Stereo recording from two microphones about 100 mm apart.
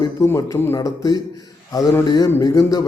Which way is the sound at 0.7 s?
40° left (ahead or behind).